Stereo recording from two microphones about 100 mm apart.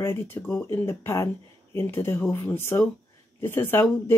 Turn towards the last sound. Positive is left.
turn(degrees=20)  # may be behind; listen again after turning